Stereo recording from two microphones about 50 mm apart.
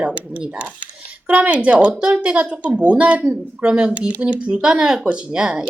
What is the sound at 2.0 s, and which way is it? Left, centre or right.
Speech, centre.